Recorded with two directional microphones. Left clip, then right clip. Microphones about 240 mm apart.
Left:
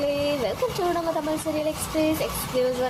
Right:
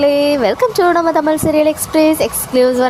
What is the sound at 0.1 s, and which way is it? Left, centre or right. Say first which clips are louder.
A woman's voice: right 12 dB; right.